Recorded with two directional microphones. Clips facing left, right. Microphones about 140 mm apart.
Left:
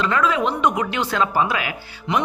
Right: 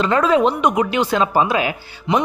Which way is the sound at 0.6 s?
15° right (ahead or behind).